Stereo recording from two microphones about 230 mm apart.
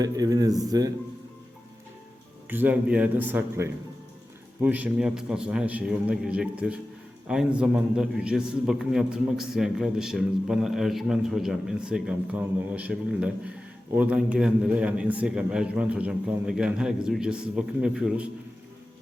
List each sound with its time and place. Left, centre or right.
0.0 s speech: centre
2.5 s a man's voice: centre